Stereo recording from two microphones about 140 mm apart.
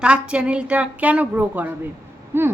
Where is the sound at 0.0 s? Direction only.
10° right (ahead or behind).